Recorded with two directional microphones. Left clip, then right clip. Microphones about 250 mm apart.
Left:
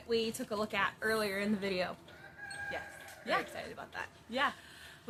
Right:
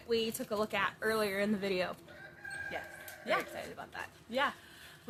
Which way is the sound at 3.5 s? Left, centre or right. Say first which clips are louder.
Even; centre.